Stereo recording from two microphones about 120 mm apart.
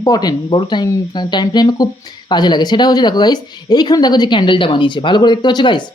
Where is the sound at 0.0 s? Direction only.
30° left (ahead or behind).